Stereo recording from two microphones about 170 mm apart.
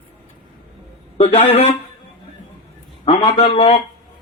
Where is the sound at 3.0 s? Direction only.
30° left (ahead or behind).